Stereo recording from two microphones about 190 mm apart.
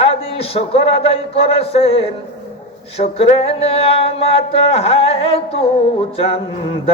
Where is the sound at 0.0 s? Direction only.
30° left (ahead or behind).